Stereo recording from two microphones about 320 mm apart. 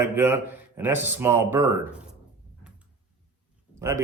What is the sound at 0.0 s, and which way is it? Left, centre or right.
A man's voice, centre.